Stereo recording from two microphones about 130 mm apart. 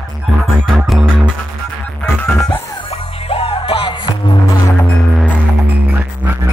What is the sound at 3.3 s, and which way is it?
Music, 50° left (ahead or behind).